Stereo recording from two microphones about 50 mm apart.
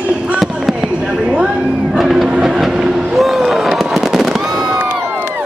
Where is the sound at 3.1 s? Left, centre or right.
Centre.